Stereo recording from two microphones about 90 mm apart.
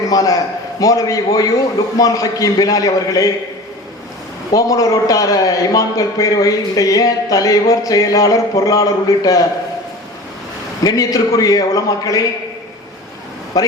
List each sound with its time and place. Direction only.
0.1 s a man's voice: 40° left (ahead or behind)
4.5 s a man's voice: 40° left (ahead or behind)
10.8 s a man's voice: 40° left (ahead or behind)
13.5 s a man's voice: 40° left (ahead or behind)